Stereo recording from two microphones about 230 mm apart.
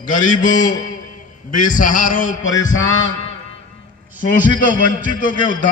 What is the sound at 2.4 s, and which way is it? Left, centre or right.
Male singing, left.